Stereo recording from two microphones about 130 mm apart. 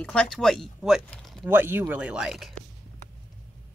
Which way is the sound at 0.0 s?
5° left (ahead or behind).